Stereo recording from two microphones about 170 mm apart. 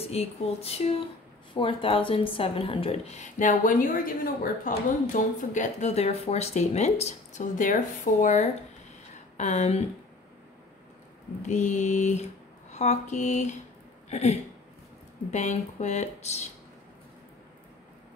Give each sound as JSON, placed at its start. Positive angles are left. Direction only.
{"t": 0.0, "sound": "a woman's voice", "side_deg": 35}
{"t": 11.4, "sound": "speech", "side_deg": 45}